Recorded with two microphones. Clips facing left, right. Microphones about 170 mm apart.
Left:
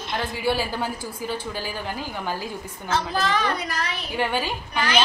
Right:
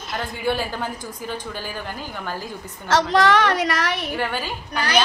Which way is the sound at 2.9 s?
85° right.